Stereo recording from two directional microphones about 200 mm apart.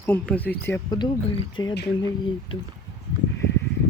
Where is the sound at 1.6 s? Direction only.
20° left (ahead or behind).